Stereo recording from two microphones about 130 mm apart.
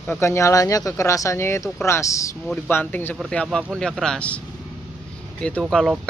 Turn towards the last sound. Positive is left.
turn(degrees=0)  # may be behind; listen again after turning